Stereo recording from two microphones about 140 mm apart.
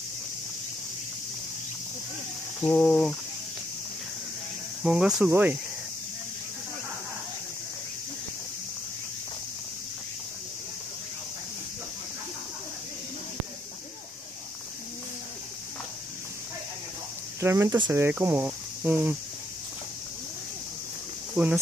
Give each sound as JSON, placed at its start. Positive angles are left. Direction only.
{"t": 2.6, "sound": "speech", "side_deg": 5}
{"t": 4.8, "sound": "speech", "side_deg": -5}
{"t": 5.3, "sound": "speech", "side_deg": -15}
{"t": 17.4, "sound": "speech", "side_deg": -20}
{"t": 21.4, "sound": "speech", "side_deg": -10}